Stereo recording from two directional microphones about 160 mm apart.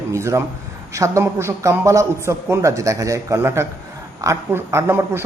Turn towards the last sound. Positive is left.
turn(degrees=-15)  # may be behind; listen again after turning